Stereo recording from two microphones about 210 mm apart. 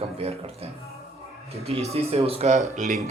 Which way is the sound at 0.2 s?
30° right (ahead or behind).